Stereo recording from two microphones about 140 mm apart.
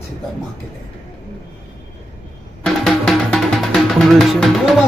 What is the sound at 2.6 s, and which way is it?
Music, 5° left (ahead or behind).